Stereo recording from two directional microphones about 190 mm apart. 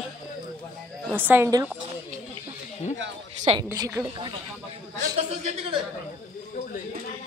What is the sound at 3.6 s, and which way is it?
Speech, 15° right (ahead or behind).